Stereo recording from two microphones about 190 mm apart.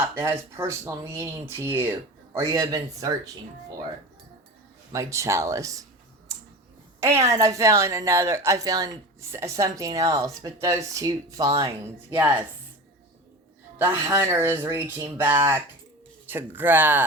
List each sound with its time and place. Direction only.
0.0 s speech: 10° right (ahead or behind)
4.9 s speech: 15° right (ahead or behind)
7.0 s speech: 15° right (ahead or behind)
13.7 s speech: 10° right (ahead or behind)